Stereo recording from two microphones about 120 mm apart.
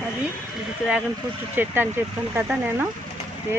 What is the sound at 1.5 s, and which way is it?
Speech, 20° right (ahead or behind).